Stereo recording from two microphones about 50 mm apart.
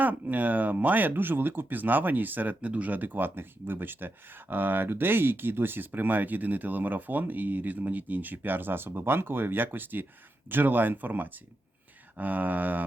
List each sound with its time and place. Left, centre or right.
0.0 s speech: right